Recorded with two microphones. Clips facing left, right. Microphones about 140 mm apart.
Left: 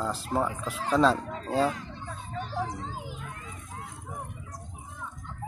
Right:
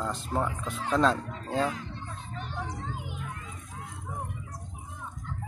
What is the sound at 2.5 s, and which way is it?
Children playing, 35° left (ahead or behind).